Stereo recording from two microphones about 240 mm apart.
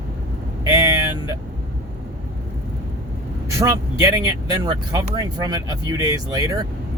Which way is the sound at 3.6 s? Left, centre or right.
Centre.